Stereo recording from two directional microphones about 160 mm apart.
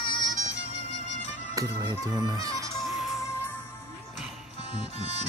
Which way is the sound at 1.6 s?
20° right (ahead or behind).